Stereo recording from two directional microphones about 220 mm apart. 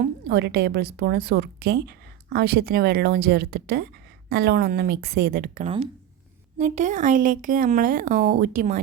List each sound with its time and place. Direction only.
0.0 s a woman's voice: 45° right (ahead or behind)
5.6 s speech: 25° right (ahead or behind); by 8.8 s 40° right (ahead or behind)